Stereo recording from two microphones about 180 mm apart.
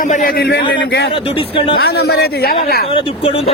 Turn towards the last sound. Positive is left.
turn(degrees=35)  # may be behind; listen again after turning